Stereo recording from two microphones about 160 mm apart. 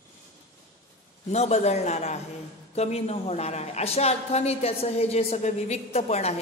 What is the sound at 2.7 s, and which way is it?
A woman's voice, 40° left (ahead or behind).